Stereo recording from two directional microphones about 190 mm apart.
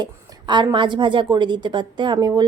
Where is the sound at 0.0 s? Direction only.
25° right (ahead or behind).